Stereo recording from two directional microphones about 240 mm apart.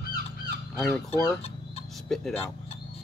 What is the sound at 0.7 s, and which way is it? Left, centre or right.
Speech, centre.